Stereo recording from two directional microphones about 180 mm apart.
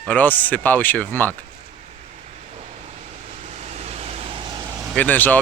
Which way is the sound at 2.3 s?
35° right (ahead or behind).